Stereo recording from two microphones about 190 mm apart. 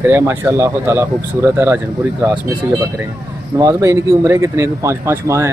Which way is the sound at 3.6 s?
15° right (ahead or behind).